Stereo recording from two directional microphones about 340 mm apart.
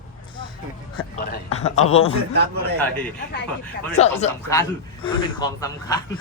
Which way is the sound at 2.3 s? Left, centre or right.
Right.